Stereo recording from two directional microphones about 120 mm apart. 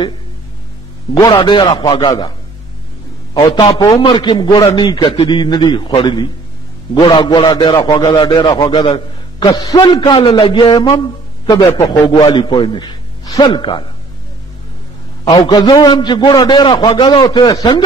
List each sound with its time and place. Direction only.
1.4 s a man's voice: 40° left (ahead or behind)
3.3 s a man's voice: 35° left (ahead or behind)
7.6 s a man's voice: 45° left (ahead or behind)
13.5 s a man's voice: 40° left (ahead or behind)
15.3 s a man's voice: 40° left (ahead or behind)